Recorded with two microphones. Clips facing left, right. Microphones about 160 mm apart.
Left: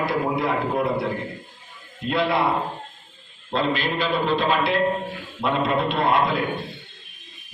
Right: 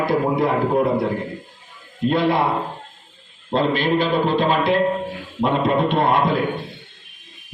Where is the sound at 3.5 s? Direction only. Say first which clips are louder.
Right 5 dB; 50° right (ahead or behind).